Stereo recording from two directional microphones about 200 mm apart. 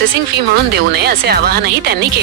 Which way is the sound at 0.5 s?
55° right (ahead or behind).